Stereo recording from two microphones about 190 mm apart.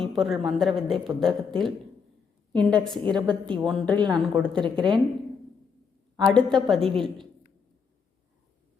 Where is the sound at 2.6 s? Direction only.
5° left (ahead or behind).